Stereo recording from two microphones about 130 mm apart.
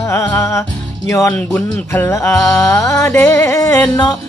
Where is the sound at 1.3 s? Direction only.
15° left (ahead or behind).